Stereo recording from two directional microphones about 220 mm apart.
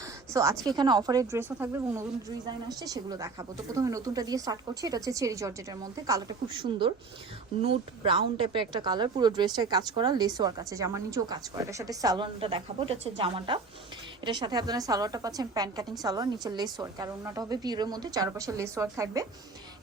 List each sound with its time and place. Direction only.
0.3 s a woman's voice: 15° right (ahead or behind)